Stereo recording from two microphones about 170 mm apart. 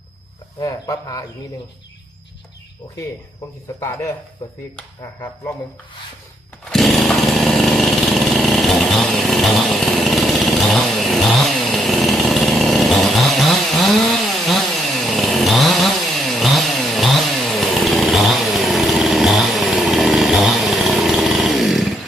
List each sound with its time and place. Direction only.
0.6 s speech: 20° left (ahead or behind)
3.8 s a man's voice: 15° left (ahead or behind)
6.7 s chainsaw: centre (ahead or behind)